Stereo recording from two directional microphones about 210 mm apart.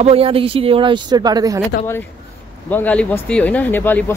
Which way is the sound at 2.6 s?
5° left (ahead or behind).